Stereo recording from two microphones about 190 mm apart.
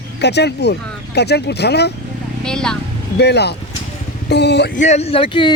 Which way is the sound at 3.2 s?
60° left (ahead or behind).